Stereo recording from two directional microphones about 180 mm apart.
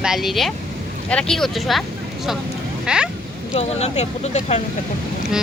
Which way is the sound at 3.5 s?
40° left (ahead or behind).